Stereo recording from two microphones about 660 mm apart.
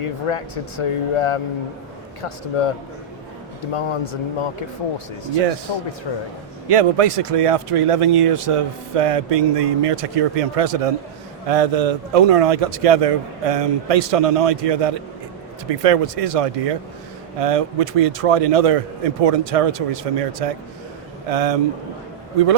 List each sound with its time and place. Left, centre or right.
0.0 s a man's voice: left
6.7 s speech: right